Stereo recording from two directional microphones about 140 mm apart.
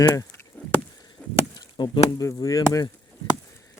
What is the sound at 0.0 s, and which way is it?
Speech, 25° left (ahead or behind).